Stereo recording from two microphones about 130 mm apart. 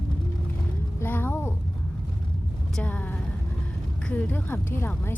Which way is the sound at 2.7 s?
10° left (ahead or behind).